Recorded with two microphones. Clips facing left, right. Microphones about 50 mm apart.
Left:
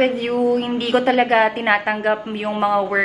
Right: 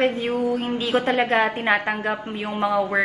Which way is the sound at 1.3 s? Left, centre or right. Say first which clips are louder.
Left 4 dB; left.